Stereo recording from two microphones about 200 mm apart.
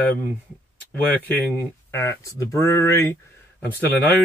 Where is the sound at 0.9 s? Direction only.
10° left (ahead or behind).